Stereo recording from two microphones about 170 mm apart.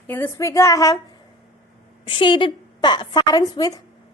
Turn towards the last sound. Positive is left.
turn(degrees=20)  # may be behind; listen again after turning